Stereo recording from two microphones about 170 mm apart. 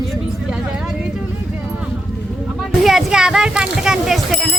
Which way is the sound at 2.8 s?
Centre (ahead or behind).